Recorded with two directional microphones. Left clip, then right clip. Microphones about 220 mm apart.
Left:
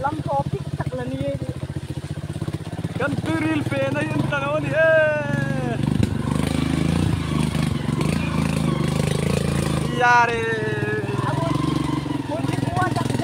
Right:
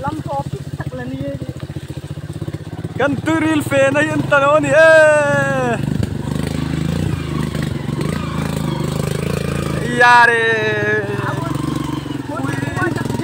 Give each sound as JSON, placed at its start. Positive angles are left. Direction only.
{"t": 3.0, "sound": "speech", "side_deg": -35}
{"t": 9.9, "sound": "speech", "side_deg": -20}